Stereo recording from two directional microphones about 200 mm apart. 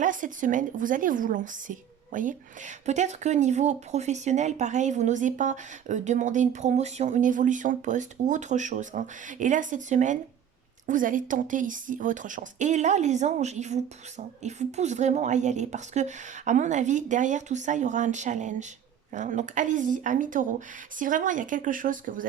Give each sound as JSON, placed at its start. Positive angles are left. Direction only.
{"t": 0.0, "sound": "a woman's voice", "side_deg": -40}